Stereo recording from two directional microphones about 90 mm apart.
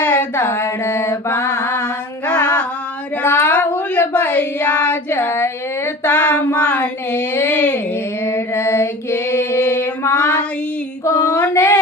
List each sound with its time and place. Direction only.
0.0 s mantra: 20° left (ahead or behind)
3.2 s child singing: 20° left (ahead or behind)
6.1 s child singing: 15° left (ahead or behind)
8.2 s a sound: 30° left (ahead or behind)
10.1 s female singing: 20° left (ahead or behind)
11.0 s a sound: 25° left (ahead or behind)